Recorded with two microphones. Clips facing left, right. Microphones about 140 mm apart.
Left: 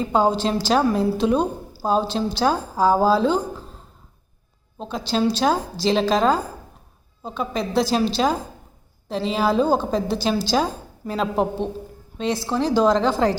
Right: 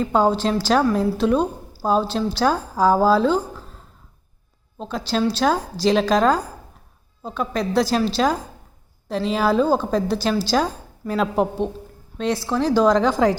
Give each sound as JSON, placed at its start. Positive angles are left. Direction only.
{"t": 0.0, "sound": "a woman's voice", "side_deg": 0}
{"t": 2.9, "sound": "a woman's voice", "side_deg": -5}
{"t": 4.8, "sound": "a woman's voice", "side_deg": 0}
{"t": 7.9, "sound": "a woman's voice", "side_deg": 5}